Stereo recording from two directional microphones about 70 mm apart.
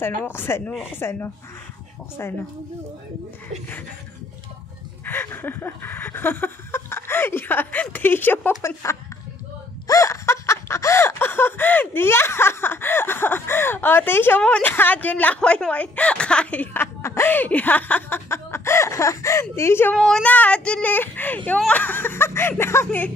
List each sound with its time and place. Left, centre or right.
0.3 s speech: left
5.0 s a sound: left
7.8 s a woman's voice: left
9.8 s snicker: left
14.6 s a woman's voice: left
16.7 s snicker: left
17.3 s a woman's voice: left
18.3 s a sound: left
19.5 s speech: left
20.0 s speech: centre
20.2 s a woman's voice: left
20.9 s a woman's voice: left
22.8 s a woman's voice: left